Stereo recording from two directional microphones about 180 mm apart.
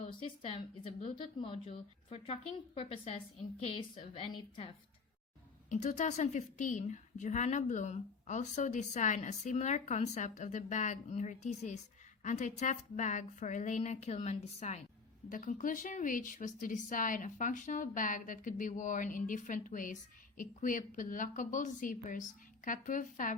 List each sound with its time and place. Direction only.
0.2 s a woman's voice: 30° left (ahead or behind)
5.6 s a woman's voice: 40° left (ahead or behind)